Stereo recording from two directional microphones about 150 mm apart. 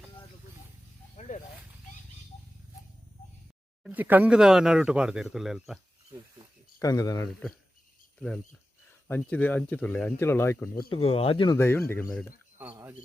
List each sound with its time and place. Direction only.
1.1 s snake: 55° left (ahead or behind)
3.8 s speech: 10° right (ahead or behind)
6.7 s speech: 25° left (ahead or behind)
8.2 s speech: 15° left (ahead or behind)
10.8 s speech: 35° left (ahead or behind)
11.5 s speech: 15° left (ahead or behind)